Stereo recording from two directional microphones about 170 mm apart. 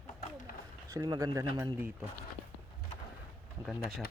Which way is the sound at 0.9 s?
20° right (ahead or behind).